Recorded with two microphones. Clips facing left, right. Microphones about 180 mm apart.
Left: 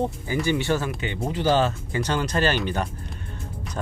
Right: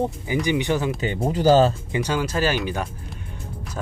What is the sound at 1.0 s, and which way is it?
Speech, 40° right (ahead or behind).